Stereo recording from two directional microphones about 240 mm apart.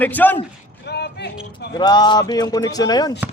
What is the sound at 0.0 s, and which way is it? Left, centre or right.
Speech, centre.